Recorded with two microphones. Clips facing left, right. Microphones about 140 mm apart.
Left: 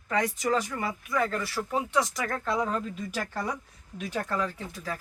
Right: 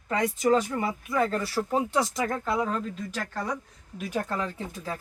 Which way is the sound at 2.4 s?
5° right (ahead or behind).